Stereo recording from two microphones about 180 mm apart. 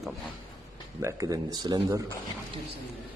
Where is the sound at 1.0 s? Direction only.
20° right (ahead or behind).